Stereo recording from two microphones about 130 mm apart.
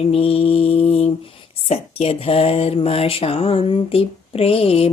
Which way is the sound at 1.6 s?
50° left (ahead or behind).